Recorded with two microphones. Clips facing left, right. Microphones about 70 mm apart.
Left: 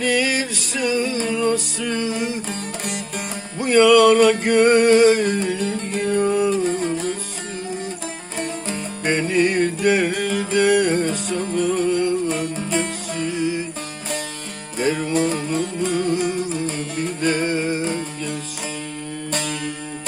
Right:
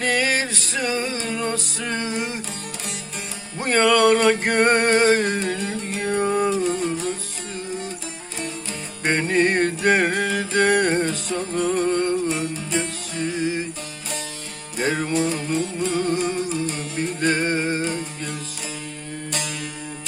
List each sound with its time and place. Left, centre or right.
0.0 s music: right
2.5 s music: left
3.6 s music: right
6.7 s music: left
8.4 s music: left
9.0 s music: right
12.3 s music: left
13.1 s music: right
14.8 s music: right
15.1 s music: left
16.0 s music: right
16.6 s music: left
17.0 s music: right
19.3 s music: left